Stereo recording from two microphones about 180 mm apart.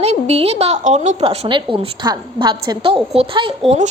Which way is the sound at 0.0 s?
35° right (ahead or behind).